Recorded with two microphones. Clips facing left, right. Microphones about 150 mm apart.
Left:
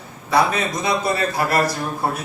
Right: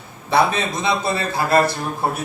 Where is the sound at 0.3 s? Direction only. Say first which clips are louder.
Right 1 dB; 25° right (ahead or behind).